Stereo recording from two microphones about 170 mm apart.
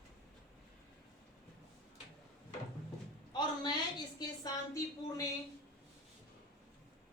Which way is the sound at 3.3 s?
25° left (ahead or behind).